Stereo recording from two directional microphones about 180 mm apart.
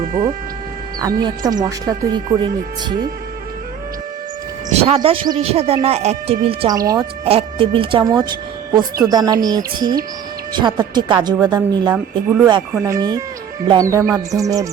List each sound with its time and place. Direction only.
0.9 s speech: 20° right (ahead or behind)
4.7 s a sound: 35° right (ahead or behind)
4.9 s a woman's voice: 25° right (ahead or behind)
6.7 s speech: 20° right (ahead or behind)
7.3 s speech: 30° right (ahead or behind)